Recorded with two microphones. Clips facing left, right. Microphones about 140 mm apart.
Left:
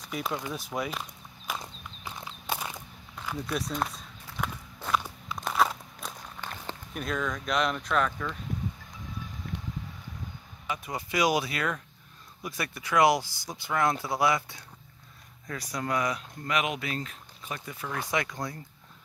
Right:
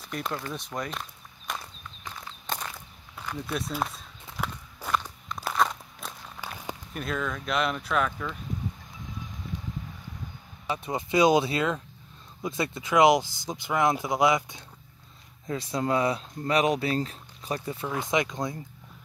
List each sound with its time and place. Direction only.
0.1 s speech: 5° left (ahead or behind)
1.6 s walk: 20° left (ahead or behind)
3.4 s speech: 5° right (ahead or behind)
4.8 s walk: 5° left (ahead or behind)
6.4 s a sound: 10° right (ahead or behind)
6.9 s speech: centre (ahead or behind)
9.5 s vehicle: 65° left (ahead or behind)
10.7 s speech: 25° right (ahead or behind)
17.8 s speech: 20° right (ahead or behind)